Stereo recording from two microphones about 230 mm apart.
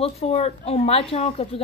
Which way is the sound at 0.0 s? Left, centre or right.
Left.